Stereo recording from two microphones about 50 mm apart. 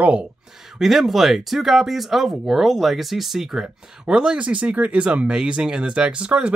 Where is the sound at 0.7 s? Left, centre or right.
Centre; by 6.5 s right.